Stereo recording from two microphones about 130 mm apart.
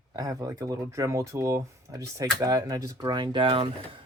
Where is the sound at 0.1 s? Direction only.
25° right (ahead or behind).